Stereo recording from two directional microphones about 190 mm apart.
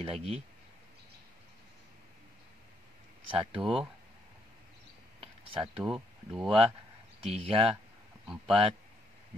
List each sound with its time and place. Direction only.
0.0 s speech: 30° right (ahead or behind)
3.3 s speech: 5° right (ahead or behind)
5.6 s speech: 5° right (ahead or behind)
7.2 s speech: 30° right (ahead or behind)